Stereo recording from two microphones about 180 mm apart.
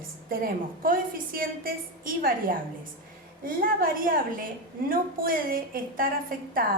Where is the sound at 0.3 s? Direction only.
50° right (ahead or behind).